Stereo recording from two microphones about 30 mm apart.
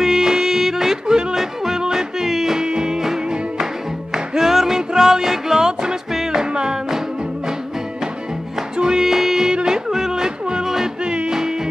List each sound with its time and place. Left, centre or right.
0.0 s music: centre
1.0 s yodeling: right
1.3 s music: centre
8.7 s music: right
9.1 s music: centre
11.1 s music: right